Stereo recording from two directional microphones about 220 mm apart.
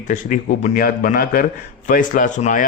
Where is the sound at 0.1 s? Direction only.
35° left (ahead or behind).